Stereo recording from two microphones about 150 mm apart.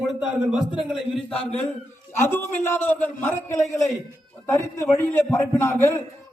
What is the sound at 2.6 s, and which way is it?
A man's voice, 15° left (ahead or behind).